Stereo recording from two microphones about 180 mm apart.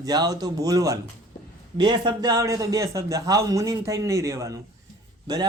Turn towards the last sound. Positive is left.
turn(degrees=-20)  # may be behind; listen again after turning